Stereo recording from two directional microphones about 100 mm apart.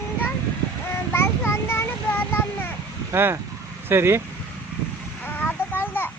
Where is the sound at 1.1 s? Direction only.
25° left (ahead or behind).